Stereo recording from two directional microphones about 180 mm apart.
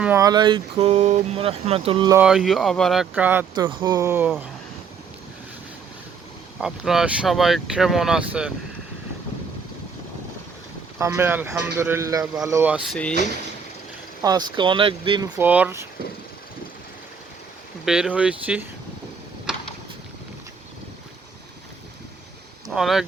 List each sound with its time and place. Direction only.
0.0 s speech: 15° right (ahead or behind)
2.1 s speech: 5° right (ahead or behind)
3.5 s speech: 25° right (ahead or behind)
6.6 s speech: centre (ahead or behind)
10.9 s speech: 15° right (ahead or behind)
14.2 s speech: 20° right (ahead or behind)
15.4 s speech: 10° right (ahead or behind)
17.8 s speech: 5° right (ahead or behind)
22.7 s speech: centre (ahead or behind)